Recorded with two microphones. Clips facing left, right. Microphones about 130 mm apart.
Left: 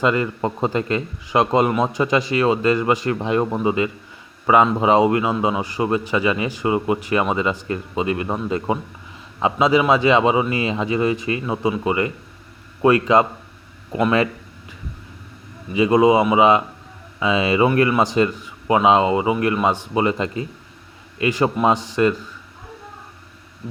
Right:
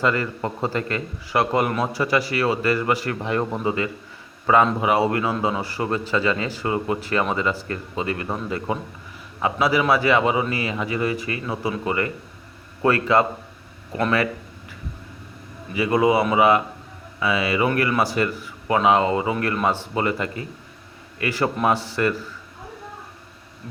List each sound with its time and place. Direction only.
0.0 s a man's voice: 20° left (ahead or behind)
15.7 s a man's voice: 20° left (ahead or behind)